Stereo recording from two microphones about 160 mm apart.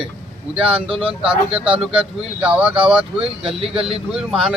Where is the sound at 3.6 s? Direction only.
35° right (ahead or behind).